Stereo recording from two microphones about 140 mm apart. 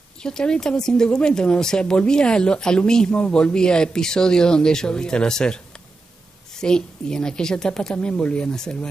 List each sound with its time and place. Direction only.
0.2 s speech: 5° left (ahead or behind)